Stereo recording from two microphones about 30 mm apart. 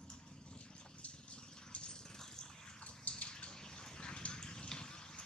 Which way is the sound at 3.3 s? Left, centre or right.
Left.